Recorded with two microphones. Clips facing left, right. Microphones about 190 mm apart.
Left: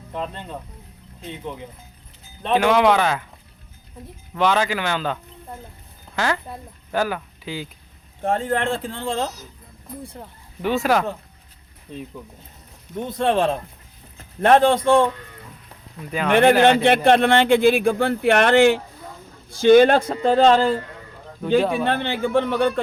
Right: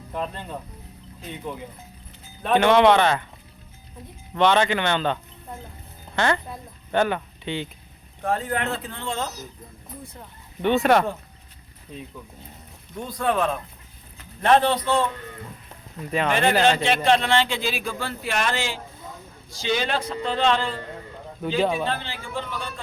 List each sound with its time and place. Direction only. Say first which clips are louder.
2.5 s speech: even; 5° left (ahead or behind)
4.4 s speech: right 1 dB; 5° left (ahead or behind)
8.2 s speech: left 4 dB; 25° left (ahead or behind)
10.6 s speech: right 1 dB; centre (ahead or behind)
13.0 s speech: left 4 dB; 25° left (ahead or behind)
14.2 s speech: left 4 dB; 50° left (ahead or behind)
16.3 s a man's voice: left 7 dB; 60° left (ahead or behind); by 20.8 s 40° left (ahead or behind)
21.6 s speech: left 1 dB; centre (ahead or behind)
21.8 s a man's voice: left 8 dB; 60° left (ahead or behind)